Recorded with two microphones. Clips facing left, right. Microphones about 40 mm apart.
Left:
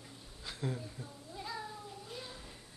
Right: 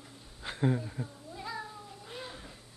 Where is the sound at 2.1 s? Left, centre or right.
Right.